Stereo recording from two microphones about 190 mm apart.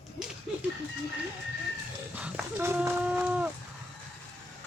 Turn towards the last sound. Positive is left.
turn(degrees=-10)  # may be behind; listen again after turning